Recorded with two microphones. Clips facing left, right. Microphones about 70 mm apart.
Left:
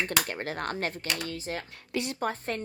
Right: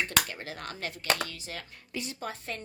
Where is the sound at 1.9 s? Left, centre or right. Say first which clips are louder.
Left 6 dB; left.